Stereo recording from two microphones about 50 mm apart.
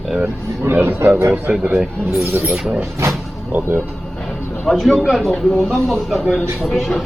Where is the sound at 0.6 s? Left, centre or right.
Right.